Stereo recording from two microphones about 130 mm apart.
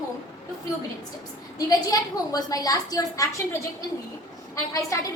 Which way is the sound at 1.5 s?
30° left (ahead or behind).